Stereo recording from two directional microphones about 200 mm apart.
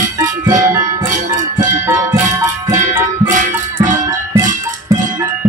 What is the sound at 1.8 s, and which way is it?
Music, 15° right (ahead or behind).